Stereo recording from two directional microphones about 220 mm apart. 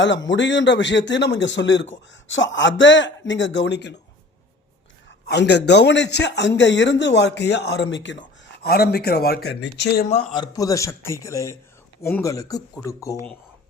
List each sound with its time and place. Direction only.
0.3 s a man's voice: 55° left (ahead or behind)
5.3 s speech: 50° left (ahead or behind)
8.6 s speech: 45° left (ahead or behind)
10.3 s speech: 15° left (ahead or behind)